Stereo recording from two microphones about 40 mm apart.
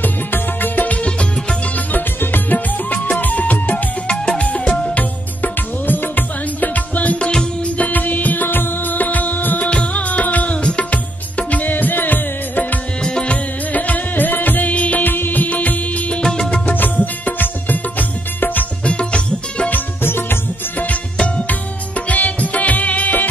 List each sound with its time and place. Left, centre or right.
0.0 s music: left
1.9 s music: left
4.9 s music: left
9.7 s music: left
10.9 s music: left
13.0 s music: left
13.3 s music: left
15.0 s music: left
15.4 s music: left
16.1 s music of bollywood: centre
16.6 s music: left
18.9 s music: left
20.0 s music: left
22.1 s music: left